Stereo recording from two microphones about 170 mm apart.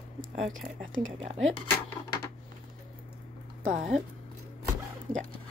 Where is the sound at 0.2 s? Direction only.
50° right (ahead or behind).